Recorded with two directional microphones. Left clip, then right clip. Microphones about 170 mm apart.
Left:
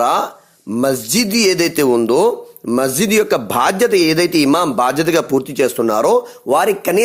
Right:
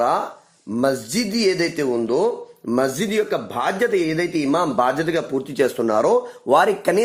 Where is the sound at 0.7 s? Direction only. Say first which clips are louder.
Left 4 dB; 25° left (ahead or behind).